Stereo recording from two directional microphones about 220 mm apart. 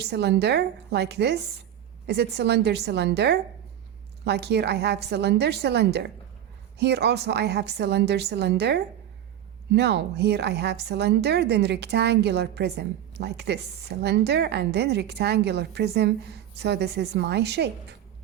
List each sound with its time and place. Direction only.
0.0 s speech: 50° right (ahead or behind)